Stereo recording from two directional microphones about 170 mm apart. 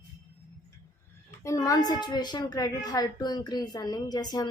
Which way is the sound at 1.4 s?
20° left (ahead or behind).